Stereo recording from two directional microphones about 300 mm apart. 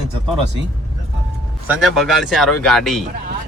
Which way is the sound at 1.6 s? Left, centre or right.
Centre.